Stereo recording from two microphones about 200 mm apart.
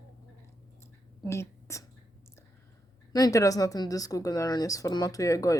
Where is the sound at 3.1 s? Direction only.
15° left (ahead or behind).